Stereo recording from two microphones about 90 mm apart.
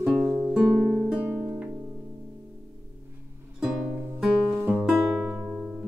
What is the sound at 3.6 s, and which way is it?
Music, 10° right (ahead or behind).